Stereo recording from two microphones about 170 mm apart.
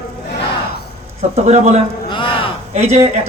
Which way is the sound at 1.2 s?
40° right (ahead or behind).